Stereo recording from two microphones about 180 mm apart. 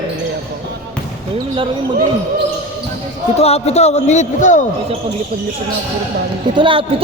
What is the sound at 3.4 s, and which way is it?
A man's voice, 35° left (ahead or behind).